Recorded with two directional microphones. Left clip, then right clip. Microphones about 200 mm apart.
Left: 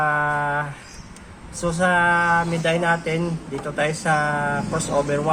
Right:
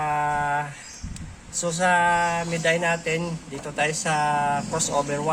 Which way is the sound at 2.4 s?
15° right (ahead or behind).